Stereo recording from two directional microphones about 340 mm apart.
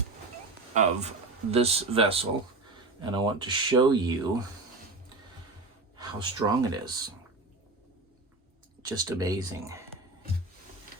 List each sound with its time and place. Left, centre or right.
0.7 s speech: centre
6.0 s speech: centre
8.8 s speech: centre